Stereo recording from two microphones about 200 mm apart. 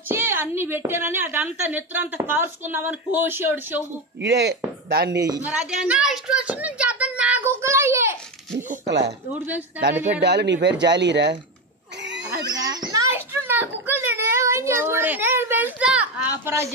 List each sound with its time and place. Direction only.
0.1 s a woman's voice: 10° right (ahead or behind)
4.2 s a man's voice: 55° right (ahead or behind)
5.1 s a woman's voice: 15° right (ahead or behind)
5.5 s speech: 5° right (ahead or behind)
8.8 s speech: 60° right (ahead or behind)
10.2 s a man's voice: 60° right (ahead or behind)
12.4 s a child's voice: 20° right (ahead or behind)
12.9 s a sound: 15° right (ahead or behind)